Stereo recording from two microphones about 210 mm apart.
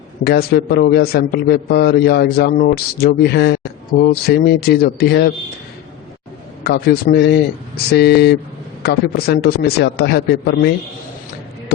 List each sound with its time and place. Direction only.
0.3 s a man's voice: 50° left (ahead or behind)
6.7 s a man's voice: 50° left (ahead or behind)